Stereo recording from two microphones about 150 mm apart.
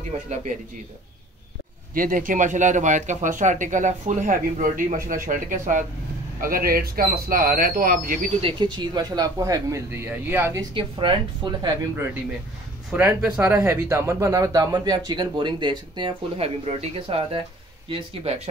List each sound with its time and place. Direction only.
2.0 s speech: 65° right (ahead or behind)
6.4 s speech: 80° right
8.4 s speech: 35° right (ahead or behind); by 10.6 s 15° right (ahead or behind)
10.7 s speech: 35° right (ahead or behind)
11.9 s speech: 15° right (ahead or behind); by 18.5 s 45° right (ahead or behind)